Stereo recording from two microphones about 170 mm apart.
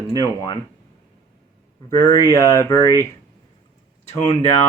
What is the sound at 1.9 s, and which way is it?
Speech, 20° left (ahead or behind).